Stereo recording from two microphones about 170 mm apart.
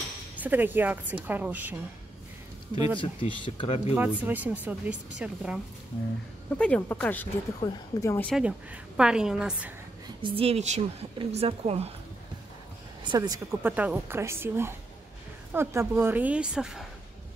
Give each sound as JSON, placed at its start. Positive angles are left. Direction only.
{"t": 0.4, "sound": "a woman's voice", "side_deg": -10}
{"t": 3.0, "sound": "speech", "side_deg": 30}
{"t": 3.9, "sound": "a woman's voice", "side_deg": -10}
{"t": 6.6, "sound": "a woman's voice", "side_deg": 10}
{"t": 8.3, "sound": "a woman's voice", "side_deg": -5}
{"t": 10.0, "sound": "a woman's voice", "side_deg": -30}
{"t": 13.0, "sound": "a woman's voice", "side_deg": -25}